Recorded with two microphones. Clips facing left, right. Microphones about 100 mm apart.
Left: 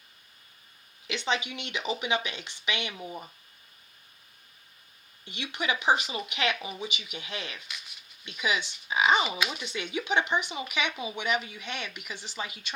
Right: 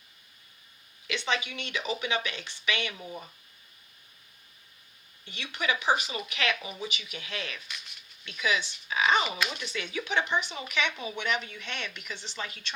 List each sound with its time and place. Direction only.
1.0 s speech: 20° left (ahead or behind)
5.3 s speech: 20° left (ahead or behind)